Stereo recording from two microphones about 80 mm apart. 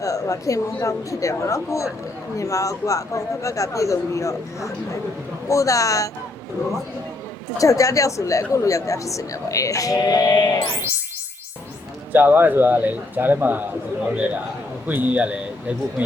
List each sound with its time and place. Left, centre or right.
0.0 s a woman's voice: left
7.6 s speech: left
12.1 s a man's voice: right
14.8 s a man's voice: right